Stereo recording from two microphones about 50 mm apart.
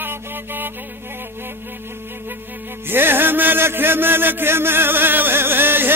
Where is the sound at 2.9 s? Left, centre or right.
Right.